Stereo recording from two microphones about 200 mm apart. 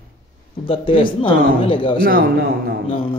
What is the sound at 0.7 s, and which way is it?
A man's voice, 25° left (ahead or behind).